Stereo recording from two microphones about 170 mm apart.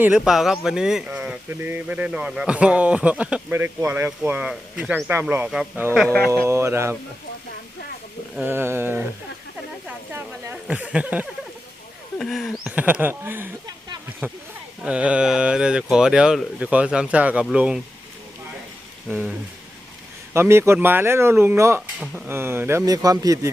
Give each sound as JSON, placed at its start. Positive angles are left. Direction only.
{"t": 0.0, "sound": "speech", "side_deg": -5}
{"t": 6.1, "sound": "speech", "side_deg": 15}
{"t": 6.4, "sound": "speech", "side_deg": -15}
{"t": 8.4, "sound": "speech", "side_deg": -15}
{"t": 9.8, "sound": "a sound", "side_deg": -10}
{"t": 12.2, "sound": "speech", "side_deg": 0}
{"t": 19.0, "sound": "speech", "side_deg": -10}
{"t": 20.3, "sound": "speech", "side_deg": -15}